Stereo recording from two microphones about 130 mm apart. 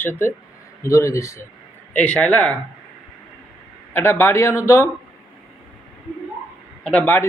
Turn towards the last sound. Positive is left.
turn(degrees=5)  # may be behind; listen again after turning